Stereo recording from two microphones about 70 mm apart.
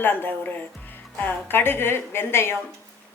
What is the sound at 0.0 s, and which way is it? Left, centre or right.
Speech, left.